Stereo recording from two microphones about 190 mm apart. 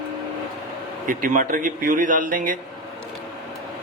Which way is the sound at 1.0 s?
45° right (ahead or behind).